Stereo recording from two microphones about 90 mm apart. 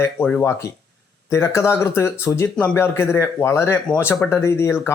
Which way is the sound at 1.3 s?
30° left (ahead or behind).